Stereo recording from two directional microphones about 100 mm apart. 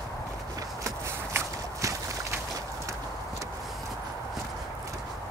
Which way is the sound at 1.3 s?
25° right (ahead or behind).